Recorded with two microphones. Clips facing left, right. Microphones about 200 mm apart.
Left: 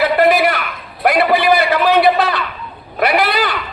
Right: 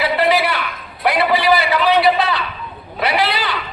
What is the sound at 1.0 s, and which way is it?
A man's voice, 50° left (ahead or behind).